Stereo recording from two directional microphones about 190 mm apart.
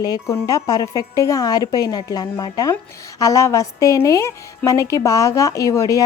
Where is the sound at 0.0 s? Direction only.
20° left (ahead or behind).